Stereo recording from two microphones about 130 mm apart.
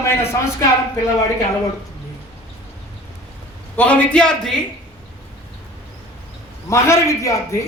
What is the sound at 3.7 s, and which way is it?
Speech, 10° left (ahead or behind).